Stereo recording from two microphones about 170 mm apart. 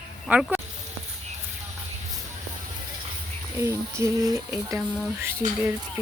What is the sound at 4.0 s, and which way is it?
Speech, 20° right (ahead or behind).